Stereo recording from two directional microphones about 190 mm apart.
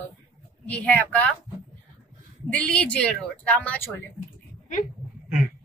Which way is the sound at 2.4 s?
5° left (ahead or behind).